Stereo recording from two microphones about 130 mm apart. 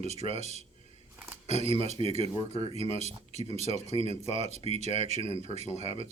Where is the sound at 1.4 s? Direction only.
55° left (ahead or behind).